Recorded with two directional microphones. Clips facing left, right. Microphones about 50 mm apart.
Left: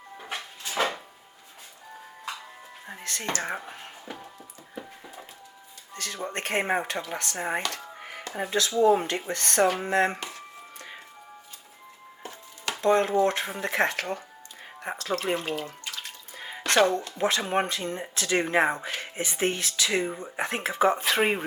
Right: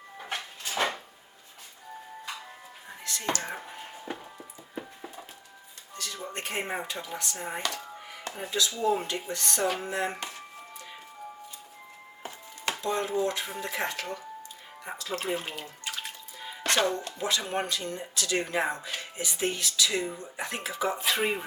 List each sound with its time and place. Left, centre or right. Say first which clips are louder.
0.3 s a sound: even; centre
3.0 s speech: left 1 dB; left
5.9 s speech: left 4 dB; left
7.7 s music: left 1 dB; left
8.4 s speech: left 7 dB; left
12.8 s speech: left 8 dB; left
14.8 s music: left 5 dB; left
15.4 s speech: left 6 dB; centre
15.8 s bathtub: right 1 dB; centre
16.6 s speech: left 5 dB; left